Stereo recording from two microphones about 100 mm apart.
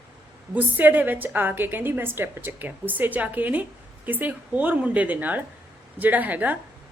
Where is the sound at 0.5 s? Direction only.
20° right (ahead or behind).